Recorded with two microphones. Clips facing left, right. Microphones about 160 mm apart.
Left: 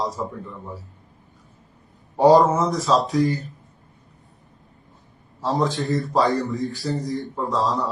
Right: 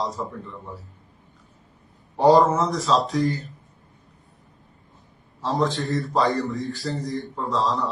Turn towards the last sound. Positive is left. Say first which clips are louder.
# left 1 dB
turn(degrees=0)  # may be behind; listen again after turning